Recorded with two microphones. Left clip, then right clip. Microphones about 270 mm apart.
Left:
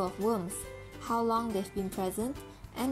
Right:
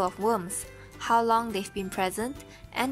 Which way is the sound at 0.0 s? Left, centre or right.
Right.